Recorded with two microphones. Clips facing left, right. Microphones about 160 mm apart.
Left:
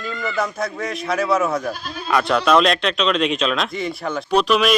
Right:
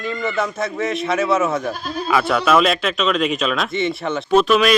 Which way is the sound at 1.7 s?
45° right (ahead or behind).